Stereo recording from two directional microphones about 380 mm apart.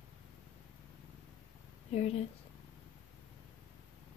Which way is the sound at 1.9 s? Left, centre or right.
Centre.